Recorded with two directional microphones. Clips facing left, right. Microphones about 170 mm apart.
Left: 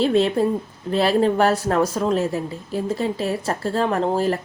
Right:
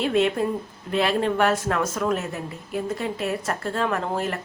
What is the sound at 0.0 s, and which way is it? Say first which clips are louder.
Speech: left 4 dB; 30° left (ahead or behind).